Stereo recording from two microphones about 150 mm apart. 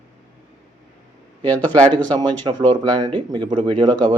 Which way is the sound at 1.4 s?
10° left (ahead or behind).